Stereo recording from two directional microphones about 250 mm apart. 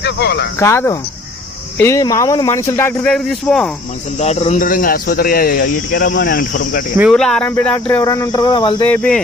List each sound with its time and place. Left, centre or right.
0.0 s speech: left
0.6 s speech: centre
4.2 s speech: left
7.0 s speech: centre
8.9 s speech: centre